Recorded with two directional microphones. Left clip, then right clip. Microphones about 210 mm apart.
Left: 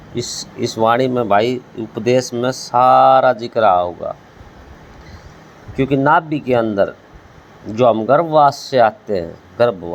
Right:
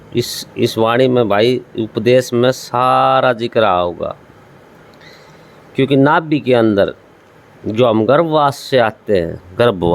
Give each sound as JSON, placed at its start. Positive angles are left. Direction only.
{"t": 0.1, "sound": "speech", "side_deg": -30}
{"t": 5.7, "sound": "speech", "side_deg": -30}